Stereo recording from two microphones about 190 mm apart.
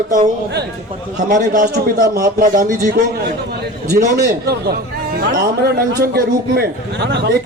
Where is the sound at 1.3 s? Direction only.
40° right (ahead or behind).